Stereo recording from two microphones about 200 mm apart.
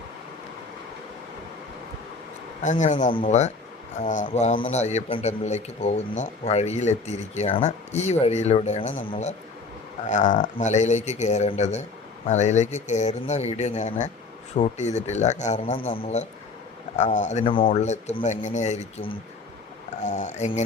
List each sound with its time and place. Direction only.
2.6 s a man's voice: 35° left (ahead or behind)